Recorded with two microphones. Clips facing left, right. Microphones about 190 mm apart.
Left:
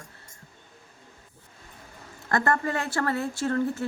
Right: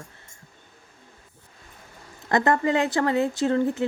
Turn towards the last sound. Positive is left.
turn(degrees=-20)  # may be behind; listen again after turning